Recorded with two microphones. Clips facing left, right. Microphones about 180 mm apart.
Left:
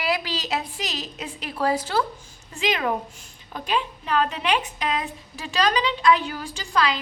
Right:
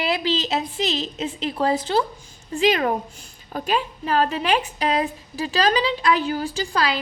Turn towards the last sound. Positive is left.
turn(degrees=-35)  # may be behind; listen again after turning